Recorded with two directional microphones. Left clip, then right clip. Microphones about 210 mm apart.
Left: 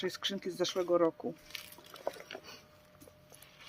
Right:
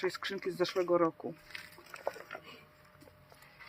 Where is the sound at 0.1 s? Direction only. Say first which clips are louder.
Even; 35° left (ahead or behind).